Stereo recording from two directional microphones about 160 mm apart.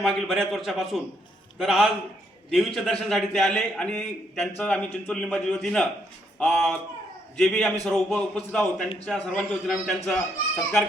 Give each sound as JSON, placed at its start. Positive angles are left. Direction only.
{"t": 0.0, "sound": "a man's voice", "side_deg": 0}